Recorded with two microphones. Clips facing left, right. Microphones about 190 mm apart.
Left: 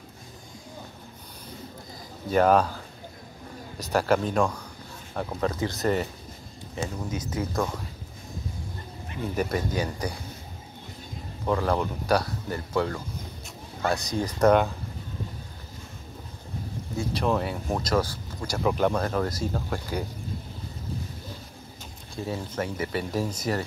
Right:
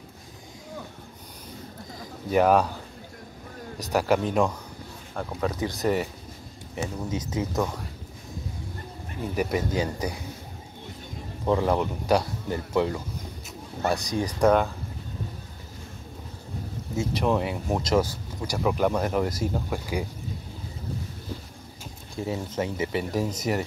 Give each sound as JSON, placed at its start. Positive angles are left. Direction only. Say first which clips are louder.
{"t": 2.3, "sound": "speech", "louder": "even", "side_deg": -10}
{"t": 3.9, "sound": "speech", "louder": "even", "side_deg": -15}
{"t": 5.5, "sound": "speech", "louder": "right 2 dB", "side_deg": -15}
{"t": 9.3, "sound": "speech", "louder": "right 1 dB", "side_deg": -10}
{"t": 9.7, "sound": "speech", "louder": "right 2 dB", "side_deg": -20}
{"t": 11.4, "sound": "speech", "louder": "right 2 dB", "side_deg": -20}
{"t": 14.0, "sound": "speech", "louder": "right 1 dB", "side_deg": -15}
{"t": 14.4, "sound": "speech", "louder": "left 1 dB", "side_deg": 0}
{"t": 16.9, "sound": "speech", "louder": "right 1 dB", "side_deg": -20}
{"t": 18.6, "sound": "speech", "louder": "even", "side_deg": -5}
{"t": 19.0, "sound": "speech", "louder": "right 2 dB", "side_deg": -15}
{"t": 22.2, "sound": "speech", "louder": "right 2 dB", "side_deg": -20}